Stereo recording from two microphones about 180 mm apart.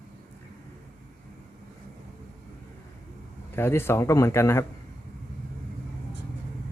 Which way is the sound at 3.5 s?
15° left (ahead or behind).